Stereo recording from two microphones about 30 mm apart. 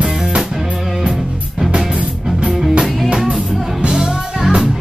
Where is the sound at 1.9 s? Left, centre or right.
Right.